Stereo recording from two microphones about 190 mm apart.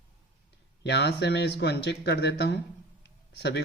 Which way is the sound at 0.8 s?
60° left (ahead or behind).